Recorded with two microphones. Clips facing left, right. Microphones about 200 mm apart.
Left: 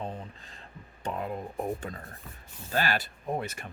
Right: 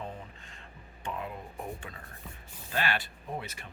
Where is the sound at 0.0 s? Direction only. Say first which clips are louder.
Left 4 dB; 35° left (ahead or behind).